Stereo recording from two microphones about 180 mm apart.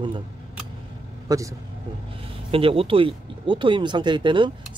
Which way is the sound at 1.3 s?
20° right (ahead or behind).